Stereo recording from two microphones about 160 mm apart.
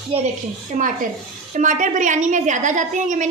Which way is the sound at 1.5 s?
50° right (ahead or behind).